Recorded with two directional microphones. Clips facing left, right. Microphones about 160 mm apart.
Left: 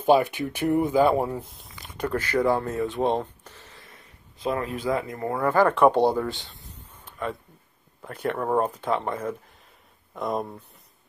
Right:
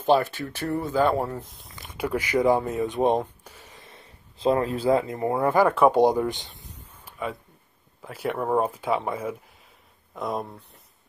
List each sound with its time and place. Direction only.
0.0 s speech: 10° left (ahead or behind)
1.6 s speech: centre (ahead or behind)